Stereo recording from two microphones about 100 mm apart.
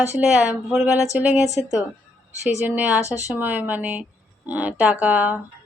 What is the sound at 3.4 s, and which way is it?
A woman's voice, 15° right (ahead or behind).